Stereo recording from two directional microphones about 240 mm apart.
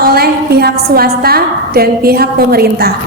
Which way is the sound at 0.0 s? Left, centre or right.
Right.